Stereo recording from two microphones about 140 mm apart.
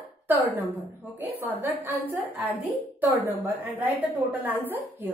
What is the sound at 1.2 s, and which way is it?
A woman's voice, 15° right (ahead or behind).